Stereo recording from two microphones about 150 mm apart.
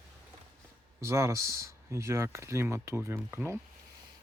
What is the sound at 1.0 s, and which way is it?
Speech, 20° right (ahead or behind).